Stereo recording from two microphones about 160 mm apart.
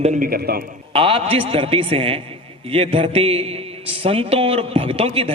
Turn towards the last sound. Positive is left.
turn(degrees=-35)  # may be behind; listen again after turning